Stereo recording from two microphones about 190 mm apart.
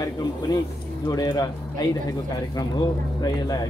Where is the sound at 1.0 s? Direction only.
20° left (ahead or behind).